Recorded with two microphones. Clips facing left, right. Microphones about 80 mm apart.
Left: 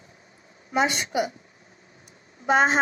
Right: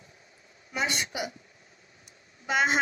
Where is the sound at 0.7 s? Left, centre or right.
Left.